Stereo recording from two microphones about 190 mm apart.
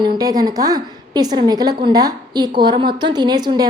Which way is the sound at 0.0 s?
20° right (ahead or behind).